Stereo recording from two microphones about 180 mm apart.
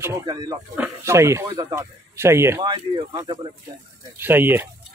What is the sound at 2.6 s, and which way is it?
Speech, 25° right (ahead or behind).